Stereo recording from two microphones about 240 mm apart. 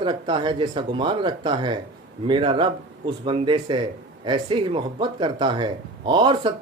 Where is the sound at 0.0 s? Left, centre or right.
Centre.